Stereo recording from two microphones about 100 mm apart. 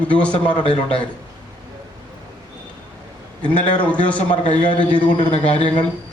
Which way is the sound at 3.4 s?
15° left (ahead or behind).